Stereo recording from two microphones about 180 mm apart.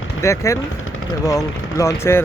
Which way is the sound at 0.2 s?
15° left (ahead or behind).